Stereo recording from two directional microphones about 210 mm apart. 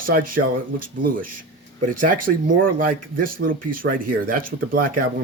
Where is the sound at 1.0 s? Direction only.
40° right (ahead or behind).